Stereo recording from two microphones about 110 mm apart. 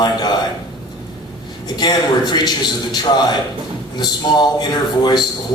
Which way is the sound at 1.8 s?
40° left (ahead or behind).